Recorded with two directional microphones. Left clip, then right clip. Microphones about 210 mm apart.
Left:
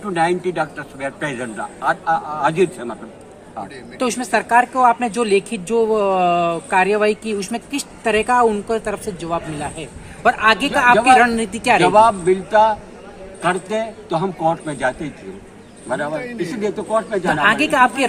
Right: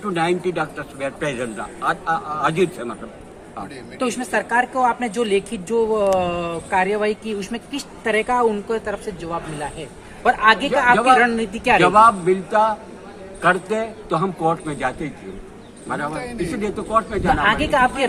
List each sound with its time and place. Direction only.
0.1 s a man's voice: 5° left (ahead or behind)
3.9 s a woman's voice: 50° left (ahead or behind)
10.9 s a man's voice: 5° left (ahead or behind)
11.2 s a woman's voice: 50° left (ahead or behind)
11.8 s a man's voice: 5° left (ahead or behind)
17.4 s a woman's voice: 50° left (ahead or behind)